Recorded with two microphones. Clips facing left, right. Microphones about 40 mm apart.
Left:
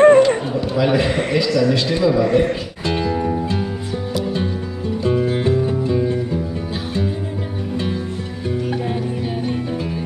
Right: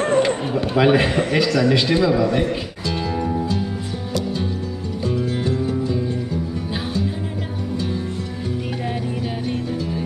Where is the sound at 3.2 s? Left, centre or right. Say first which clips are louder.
Left 2 dB; centre.